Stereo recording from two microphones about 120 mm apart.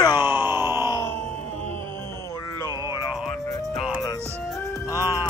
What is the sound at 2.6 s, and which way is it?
Music, 35° left (ahead or behind).